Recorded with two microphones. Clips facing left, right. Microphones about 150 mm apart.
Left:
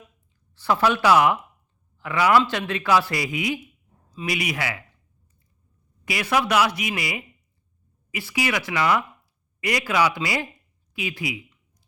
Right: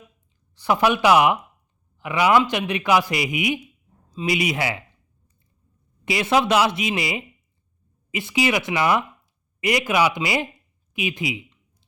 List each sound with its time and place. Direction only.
0.5 s a man's voice: 15° right (ahead or behind)
6.1 s speech: 25° right (ahead or behind)
10.9 s a sound: 20° right (ahead or behind)